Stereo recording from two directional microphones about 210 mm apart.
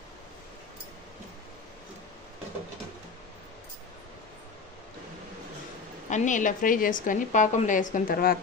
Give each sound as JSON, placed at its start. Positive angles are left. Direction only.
{"t": 6.0, "sound": "a woman's voice", "side_deg": 35}